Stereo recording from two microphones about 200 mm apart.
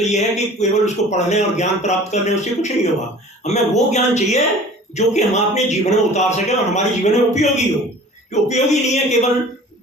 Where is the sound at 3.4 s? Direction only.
35° left (ahead or behind).